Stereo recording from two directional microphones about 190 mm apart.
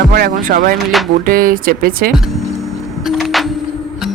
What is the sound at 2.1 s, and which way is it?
Vehicle, centre (ahead or behind).